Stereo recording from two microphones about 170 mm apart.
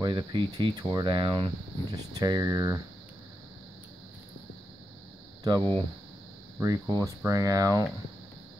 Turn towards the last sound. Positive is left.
turn(degrees=-20)  # may be behind; listen again after turning